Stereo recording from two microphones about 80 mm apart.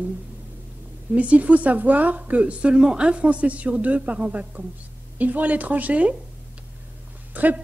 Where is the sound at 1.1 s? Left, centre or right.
Centre.